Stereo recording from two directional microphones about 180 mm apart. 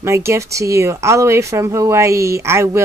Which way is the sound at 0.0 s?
15° right (ahead or behind).